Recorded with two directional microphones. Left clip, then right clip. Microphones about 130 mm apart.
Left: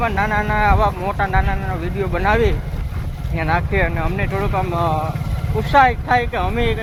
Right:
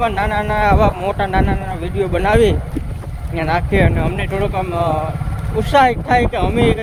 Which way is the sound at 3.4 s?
90° right.